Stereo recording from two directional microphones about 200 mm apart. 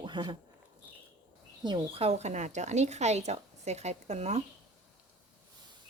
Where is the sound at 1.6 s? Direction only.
25° right (ahead or behind).